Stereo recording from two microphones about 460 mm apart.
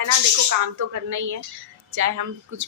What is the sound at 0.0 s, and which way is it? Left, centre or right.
Speech, right.